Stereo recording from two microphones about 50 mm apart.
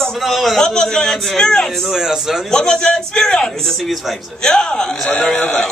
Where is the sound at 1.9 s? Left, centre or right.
Centre.